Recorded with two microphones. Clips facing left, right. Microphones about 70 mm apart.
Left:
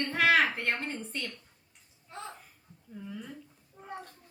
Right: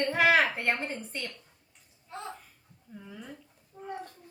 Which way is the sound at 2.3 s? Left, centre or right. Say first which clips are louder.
Right 2 dB; centre.